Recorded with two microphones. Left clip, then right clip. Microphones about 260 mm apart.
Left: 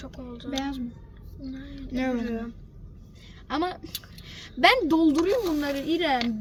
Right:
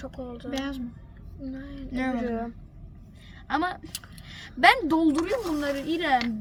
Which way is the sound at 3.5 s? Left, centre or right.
Right.